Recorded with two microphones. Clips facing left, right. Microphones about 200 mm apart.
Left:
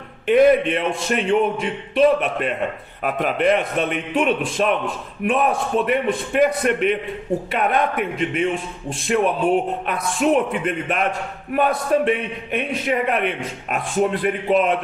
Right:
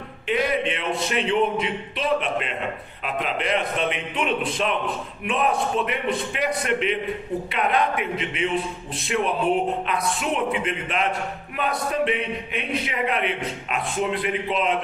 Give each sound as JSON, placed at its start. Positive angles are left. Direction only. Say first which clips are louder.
{"t": 0.3, "sound": "a man's voice", "louder": "left 9 dB", "side_deg": 55}
{"t": 9.8, "sound": "a man's voice", "louder": "left 5 dB", "side_deg": 50}